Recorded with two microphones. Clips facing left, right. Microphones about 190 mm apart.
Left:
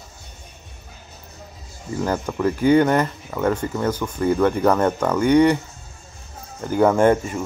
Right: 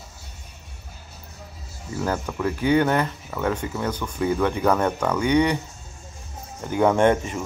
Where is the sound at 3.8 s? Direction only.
10° left (ahead or behind).